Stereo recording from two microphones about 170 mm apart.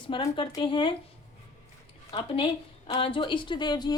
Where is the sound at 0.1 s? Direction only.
25° left (ahead or behind).